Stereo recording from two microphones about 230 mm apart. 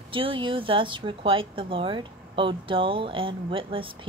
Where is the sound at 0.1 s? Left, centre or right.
Right.